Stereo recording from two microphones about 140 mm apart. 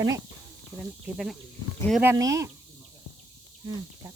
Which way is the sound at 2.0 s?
20° right (ahead or behind).